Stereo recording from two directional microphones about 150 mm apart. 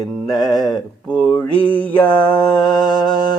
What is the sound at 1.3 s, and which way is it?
Mantra, 10° left (ahead or behind).